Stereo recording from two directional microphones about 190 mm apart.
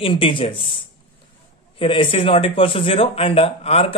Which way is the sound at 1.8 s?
30° left (ahead or behind).